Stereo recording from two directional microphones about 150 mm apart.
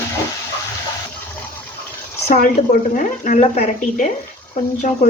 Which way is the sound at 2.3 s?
70° left (ahead or behind).